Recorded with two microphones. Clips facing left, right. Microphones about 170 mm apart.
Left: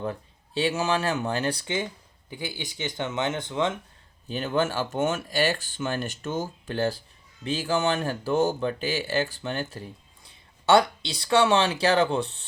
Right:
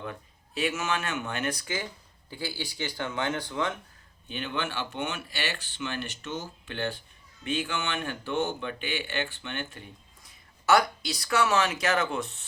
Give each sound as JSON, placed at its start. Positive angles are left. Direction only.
{"t": 0.0, "sound": "speech", "side_deg": 30}
{"t": 4.3, "sound": "speech", "side_deg": 40}